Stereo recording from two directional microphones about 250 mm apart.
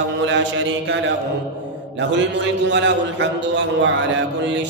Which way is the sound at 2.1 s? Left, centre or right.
Right.